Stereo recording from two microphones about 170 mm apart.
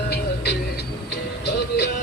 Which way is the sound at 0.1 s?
70° left (ahead or behind).